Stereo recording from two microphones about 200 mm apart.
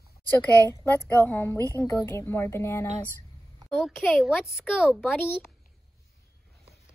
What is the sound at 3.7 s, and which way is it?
A woman's voice, centre (ahead or behind).